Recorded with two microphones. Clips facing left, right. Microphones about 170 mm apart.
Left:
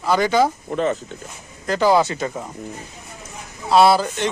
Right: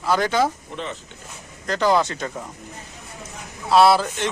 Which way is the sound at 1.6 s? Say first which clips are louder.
Left 3 dB; 5° left (ahead or behind).